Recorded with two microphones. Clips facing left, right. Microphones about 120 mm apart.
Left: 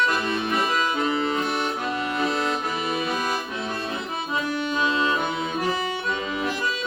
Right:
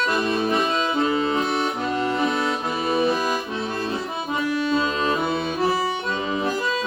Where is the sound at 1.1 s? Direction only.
25° right (ahead or behind).